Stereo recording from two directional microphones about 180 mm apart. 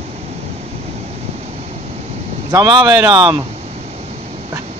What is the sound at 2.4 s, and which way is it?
Speech, 20° right (ahead or behind).